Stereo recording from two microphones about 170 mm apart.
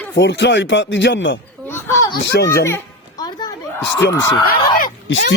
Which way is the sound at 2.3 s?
70° left (ahead or behind).